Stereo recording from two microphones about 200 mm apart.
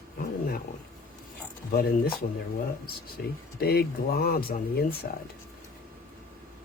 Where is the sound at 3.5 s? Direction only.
50° left (ahead or behind).